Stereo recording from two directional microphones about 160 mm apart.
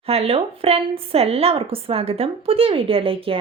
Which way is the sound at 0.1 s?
40° right (ahead or behind).